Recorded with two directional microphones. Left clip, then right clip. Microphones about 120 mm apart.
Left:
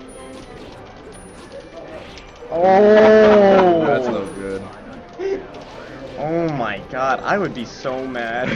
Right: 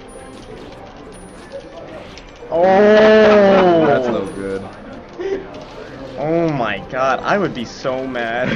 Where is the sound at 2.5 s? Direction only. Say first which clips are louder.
Right 1 dB; 10° right (ahead or behind).